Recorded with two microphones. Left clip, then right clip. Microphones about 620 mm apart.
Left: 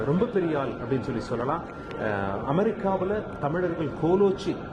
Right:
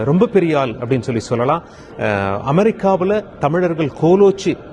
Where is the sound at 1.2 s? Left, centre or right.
Right.